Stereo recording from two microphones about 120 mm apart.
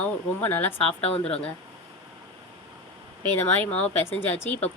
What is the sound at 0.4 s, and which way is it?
Speech, 15° left (ahead or behind).